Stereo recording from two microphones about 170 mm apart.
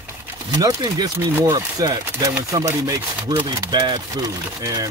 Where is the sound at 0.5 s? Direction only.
25° right (ahead or behind).